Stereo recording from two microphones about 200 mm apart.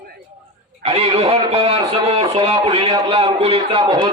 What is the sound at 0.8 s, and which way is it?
A man's voice, 30° right (ahead or behind).